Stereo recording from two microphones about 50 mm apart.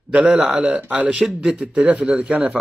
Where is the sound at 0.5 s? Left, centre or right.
Right.